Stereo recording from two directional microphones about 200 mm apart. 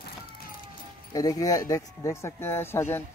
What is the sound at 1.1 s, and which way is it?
A child's voice, 15° left (ahead or behind).